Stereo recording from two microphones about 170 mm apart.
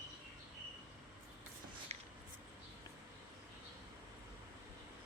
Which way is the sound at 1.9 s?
40° right (ahead or behind).